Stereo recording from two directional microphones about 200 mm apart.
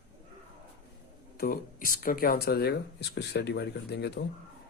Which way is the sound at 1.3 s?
50° left (ahead or behind).